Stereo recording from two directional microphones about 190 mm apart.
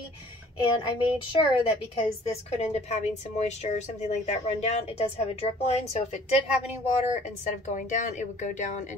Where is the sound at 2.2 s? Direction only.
35° left (ahead or behind).